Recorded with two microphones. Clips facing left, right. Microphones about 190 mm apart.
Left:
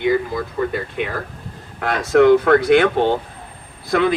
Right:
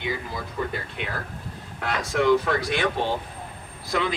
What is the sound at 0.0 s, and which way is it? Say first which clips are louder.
Speech: left 12 dB; 60° left (ahead or behind).